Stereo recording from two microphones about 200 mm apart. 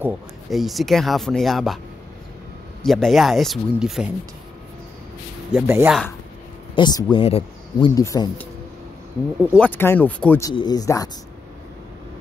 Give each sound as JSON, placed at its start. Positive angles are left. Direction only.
{"t": 0.0, "sound": "speech", "side_deg": 0}
{"t": 2.8, "sound": "speech", "side_deg": 0}
{"t": 5.5, "sound": "speech", "side_deg": -10}
{"t": 6.7, "sound": "speech", "side_deg": 20}
{"t": 7.9, "sound": "speech", "side_deg": 15}
{"t": 9.6, "sound": "speech", "side_deg": 10}
{"t": 10.5, "sound": "speech", "side_deg": 20}